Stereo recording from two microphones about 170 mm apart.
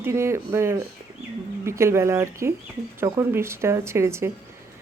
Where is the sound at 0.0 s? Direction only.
15° right (ahead or behind).